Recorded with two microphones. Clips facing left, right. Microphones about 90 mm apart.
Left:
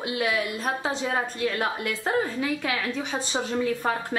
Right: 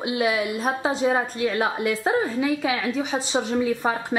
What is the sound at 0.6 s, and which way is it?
A woman's voice, 10° right (ahead or behind).